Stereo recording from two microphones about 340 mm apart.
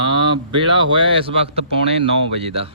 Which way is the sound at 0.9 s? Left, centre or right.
Centre.